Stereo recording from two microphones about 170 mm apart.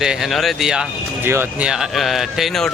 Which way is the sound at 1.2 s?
15° right (ahead or behind).